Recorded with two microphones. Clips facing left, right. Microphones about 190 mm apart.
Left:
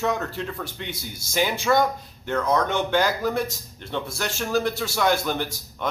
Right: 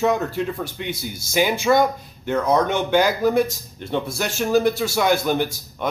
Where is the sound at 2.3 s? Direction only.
15° right (ahead or behind).